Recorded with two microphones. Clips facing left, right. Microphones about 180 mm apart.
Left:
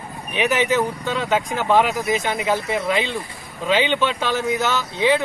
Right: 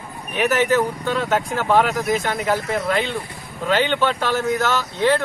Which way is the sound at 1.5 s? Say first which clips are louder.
Even; 15° left (ahead or behind).